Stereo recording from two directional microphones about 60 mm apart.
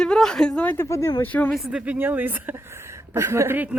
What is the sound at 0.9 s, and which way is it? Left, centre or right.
Speech, left.